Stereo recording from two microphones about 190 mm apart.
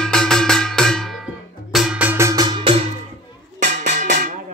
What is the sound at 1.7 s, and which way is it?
Music, 10° right (ahead or behind).